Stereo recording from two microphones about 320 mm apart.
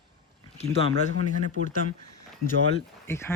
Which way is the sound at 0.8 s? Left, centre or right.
Right.